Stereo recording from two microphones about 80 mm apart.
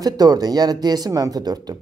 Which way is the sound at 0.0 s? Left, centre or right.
Right.